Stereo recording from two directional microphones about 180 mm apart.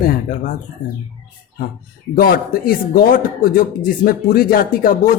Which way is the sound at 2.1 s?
55° left (ahead or behind).